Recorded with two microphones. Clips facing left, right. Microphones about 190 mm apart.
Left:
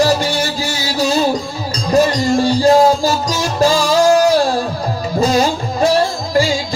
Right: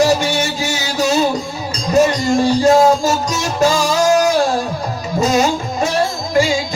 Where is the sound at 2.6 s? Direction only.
35° left (ahead or behind).